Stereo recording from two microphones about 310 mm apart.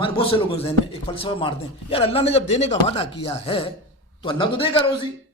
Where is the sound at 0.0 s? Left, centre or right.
Centre.